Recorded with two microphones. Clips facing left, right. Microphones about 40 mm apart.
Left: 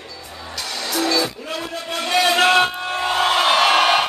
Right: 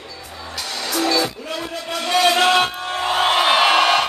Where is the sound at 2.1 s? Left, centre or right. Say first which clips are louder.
Even; centre.